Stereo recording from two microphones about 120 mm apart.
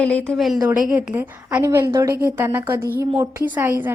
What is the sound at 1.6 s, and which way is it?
Speech, 25° right (ahead or behind).